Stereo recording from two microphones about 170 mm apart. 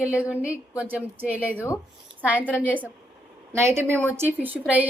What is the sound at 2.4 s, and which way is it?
Speech, 10° left (ahead or behind).